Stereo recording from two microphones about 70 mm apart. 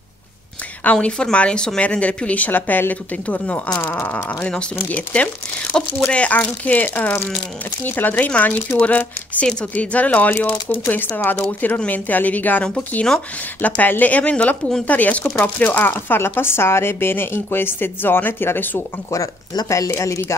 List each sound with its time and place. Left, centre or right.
1.0 s speech: centre
3.8 s speech: left
4.1 s speech: left
12.6 s speech: centre
13.6 s speech: left
20.0 s speech: left